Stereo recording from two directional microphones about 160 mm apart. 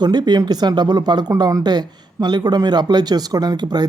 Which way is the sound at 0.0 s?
25° right (ahead or behind).